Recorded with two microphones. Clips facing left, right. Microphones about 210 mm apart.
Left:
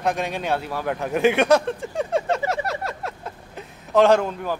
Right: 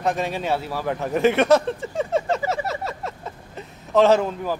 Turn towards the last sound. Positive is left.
turn(degrees=-5)  # may be behind; listen again after turning